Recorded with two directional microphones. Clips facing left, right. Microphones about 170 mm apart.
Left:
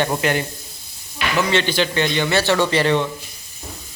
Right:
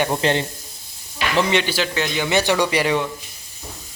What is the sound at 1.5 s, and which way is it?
Speech, 10° right (ahead or behind).